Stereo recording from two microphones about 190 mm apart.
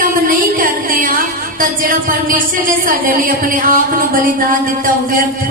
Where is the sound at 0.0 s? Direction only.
45° right (ahead or behind).